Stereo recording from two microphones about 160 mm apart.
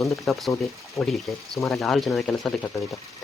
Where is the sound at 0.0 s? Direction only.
Centre (ahead or behind).